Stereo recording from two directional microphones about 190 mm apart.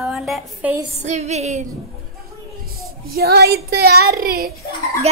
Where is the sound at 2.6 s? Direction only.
50° right (ahead or behind).